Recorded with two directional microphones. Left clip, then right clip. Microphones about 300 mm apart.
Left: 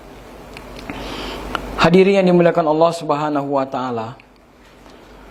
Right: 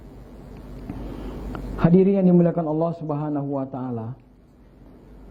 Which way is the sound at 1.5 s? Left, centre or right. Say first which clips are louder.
Left 8 dB; centre.